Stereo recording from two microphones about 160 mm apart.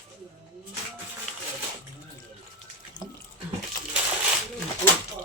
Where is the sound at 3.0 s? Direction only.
25° left (ahead or behind).